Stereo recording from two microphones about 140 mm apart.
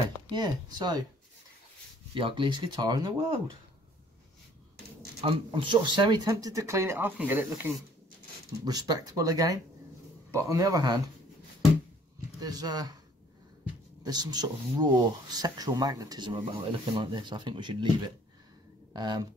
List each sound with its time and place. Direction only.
0.3 s speech: 30° right (ahead or behind)
2.1 s speech: 35° right (ahead or behind)
5.2 s speech: 35° right (ahead or behind); by 7.7 s 15° right (ahead or behind)
8.6 s speech: 25° right (ahead or behind)
12.4 s speech: 30° right (ahead or behind)
14.0 s speech: 30° right (ahead or behind)
18.9 s speech: 30° right (ahead or behind)